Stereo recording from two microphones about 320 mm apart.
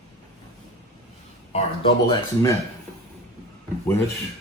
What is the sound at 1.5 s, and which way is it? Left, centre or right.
Speech, centre.